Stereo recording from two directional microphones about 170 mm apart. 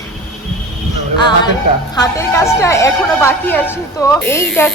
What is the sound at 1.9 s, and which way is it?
Speech, 20° left (ahead or behind).